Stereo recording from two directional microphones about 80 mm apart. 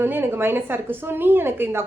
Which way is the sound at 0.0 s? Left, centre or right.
Right.